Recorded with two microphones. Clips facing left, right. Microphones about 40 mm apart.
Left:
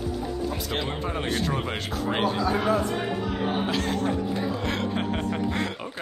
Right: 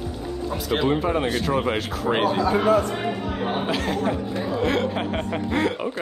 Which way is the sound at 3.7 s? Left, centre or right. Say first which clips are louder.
Right 2 dB; centre.